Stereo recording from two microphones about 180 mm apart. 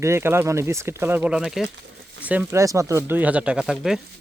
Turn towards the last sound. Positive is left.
turn(degrees=0)  # may be behind; listen again after turning